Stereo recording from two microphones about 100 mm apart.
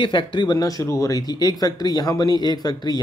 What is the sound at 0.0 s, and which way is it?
Speech, 55° left (ahead or behind).